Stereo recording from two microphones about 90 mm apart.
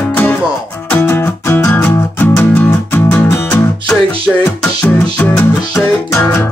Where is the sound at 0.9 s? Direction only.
25° left (ahead or behind).